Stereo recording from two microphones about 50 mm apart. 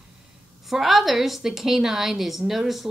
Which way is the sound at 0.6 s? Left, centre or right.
Centre.